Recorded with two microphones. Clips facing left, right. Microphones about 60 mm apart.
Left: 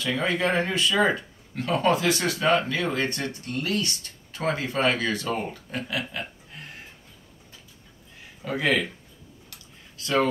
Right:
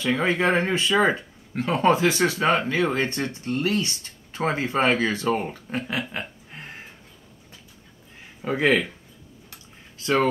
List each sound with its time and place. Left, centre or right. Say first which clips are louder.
0.0 s speech: right 3 dB; right
8.5 s speech: right 3 dB; right
9.5 s a sound: right 2 dB; right